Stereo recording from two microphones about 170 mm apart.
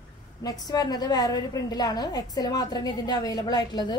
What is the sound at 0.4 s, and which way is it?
A woman's voice, 20° left (ahead or behind).